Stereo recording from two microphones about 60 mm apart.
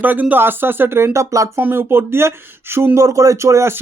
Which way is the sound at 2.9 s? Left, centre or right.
Right.